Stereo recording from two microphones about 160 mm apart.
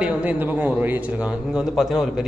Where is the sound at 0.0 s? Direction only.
10° right (ahead or behind).